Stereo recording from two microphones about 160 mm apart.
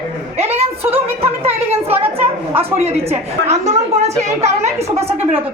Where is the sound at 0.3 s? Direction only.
40° right (ahead or behind).